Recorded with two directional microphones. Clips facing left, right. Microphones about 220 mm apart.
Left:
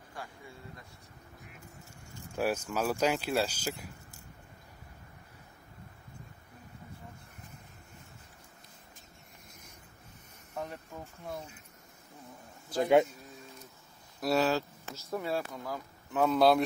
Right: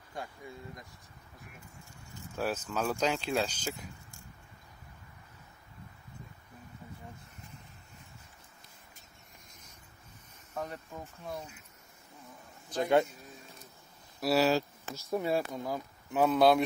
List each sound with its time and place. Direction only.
2.3 s speech: 10° left (ahead or behind)
10.5 s a sound: 5° left (ahead or behind)
12.7 s speech: 10° left (ahead or behind)
14.2 s speech: 5° right (ahead or behind)
16.3 s speech: centre (ahead or behind)